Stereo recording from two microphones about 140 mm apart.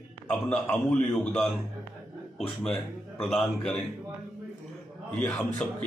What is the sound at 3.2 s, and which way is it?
Speech, centre (ahead or behind).